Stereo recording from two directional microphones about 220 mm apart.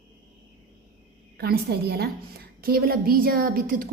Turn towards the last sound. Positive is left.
turn(degrees=-40)  # may be behind; listen again after turning